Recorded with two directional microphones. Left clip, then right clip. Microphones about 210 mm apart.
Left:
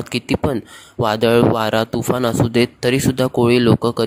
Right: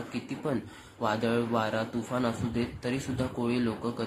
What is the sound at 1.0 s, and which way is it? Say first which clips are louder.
Speech: left 15 dB; 45° left (ahead or behind).